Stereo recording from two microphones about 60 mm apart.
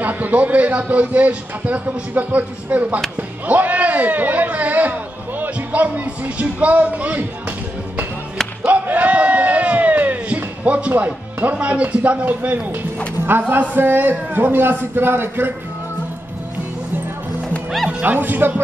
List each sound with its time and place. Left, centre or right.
0.0 s a man's voice: right
8.7 s crowd: right
11.4 s a man's voice: right
17.8 s speech: right